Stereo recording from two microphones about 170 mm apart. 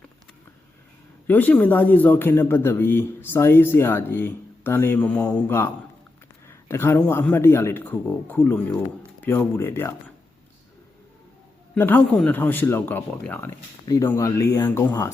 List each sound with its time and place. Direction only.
1.3 s a man's voice: 10° left (ahead or behind)
11.7 s a man's voice: 10° left (ahead or behind)